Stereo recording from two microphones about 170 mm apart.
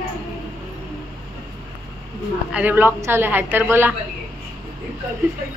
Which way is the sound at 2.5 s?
10° right (ahead or behind).